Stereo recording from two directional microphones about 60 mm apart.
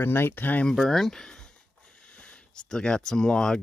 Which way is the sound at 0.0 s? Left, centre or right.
Left.